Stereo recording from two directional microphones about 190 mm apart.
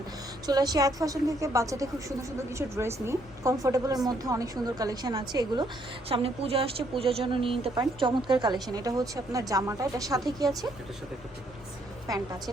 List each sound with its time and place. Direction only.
0.4 s a woman's voice: 20° right (ahead or behind)